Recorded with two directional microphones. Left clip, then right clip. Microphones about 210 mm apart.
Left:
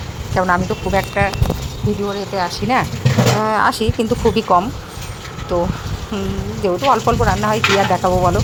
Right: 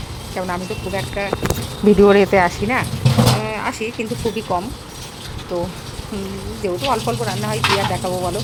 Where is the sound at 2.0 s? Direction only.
35° right (ahead or behind).